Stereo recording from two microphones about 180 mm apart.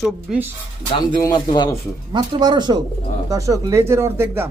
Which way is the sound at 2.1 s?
25° right (ahead or behind).